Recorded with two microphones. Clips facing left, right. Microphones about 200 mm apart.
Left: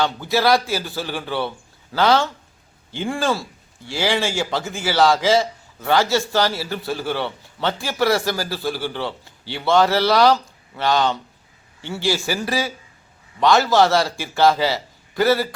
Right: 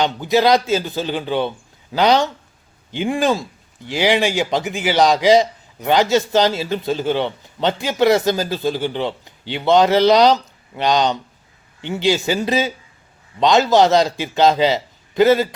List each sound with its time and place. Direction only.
0.0 s a man's voice: 20° right (ahead or behind)